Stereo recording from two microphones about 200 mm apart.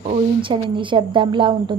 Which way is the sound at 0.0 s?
30° right (ahead or behind).